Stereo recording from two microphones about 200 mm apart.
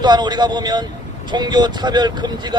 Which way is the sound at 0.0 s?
20° right (ahead or behind).